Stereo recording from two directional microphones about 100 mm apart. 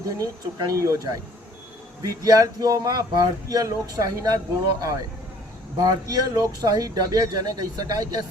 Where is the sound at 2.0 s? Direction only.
35° right (ahead or behind).